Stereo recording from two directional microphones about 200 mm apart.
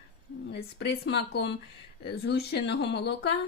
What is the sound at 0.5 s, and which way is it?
A woman's voice, 55° left (ahead or behind).